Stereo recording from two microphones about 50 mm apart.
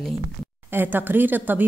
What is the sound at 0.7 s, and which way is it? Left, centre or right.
Speech, right.